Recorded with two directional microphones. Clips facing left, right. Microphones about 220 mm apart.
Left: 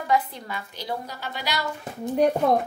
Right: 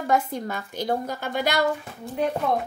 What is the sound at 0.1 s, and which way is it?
A woman's voice, 45° right (ahead or behind).